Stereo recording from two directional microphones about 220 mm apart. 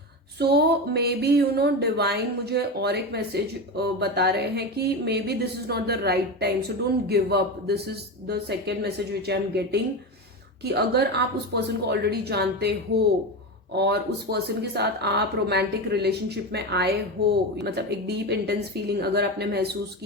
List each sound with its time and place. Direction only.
0.3 s speech: 45° right (ahead or behind)
13.7 s speech: 50° right (ahead or behind)